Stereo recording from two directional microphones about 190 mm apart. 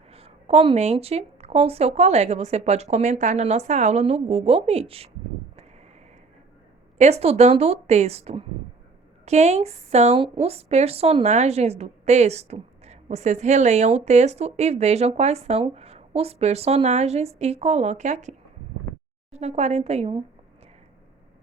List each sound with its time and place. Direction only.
0.1 s a woman's voice: 30° right (ahead or behind)
7.0 s a woman's voice: 35° right (ahead or behind)